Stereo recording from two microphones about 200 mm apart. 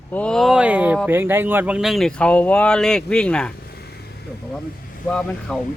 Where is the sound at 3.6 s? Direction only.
50° left (ahead or behind).